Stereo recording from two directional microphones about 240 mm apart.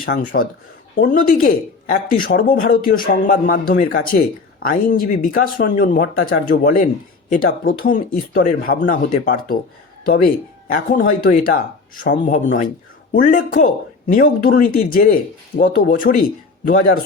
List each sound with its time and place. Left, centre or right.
0.0 s speech: left